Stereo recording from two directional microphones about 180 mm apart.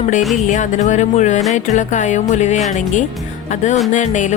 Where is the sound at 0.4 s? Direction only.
40° left (ahead or behind).